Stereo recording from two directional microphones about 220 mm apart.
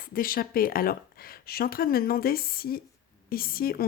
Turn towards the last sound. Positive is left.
turn(degrees=40)  # may be behind; listen again after turning